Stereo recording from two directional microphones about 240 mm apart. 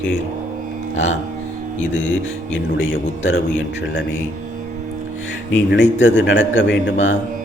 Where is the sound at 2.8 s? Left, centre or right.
Left.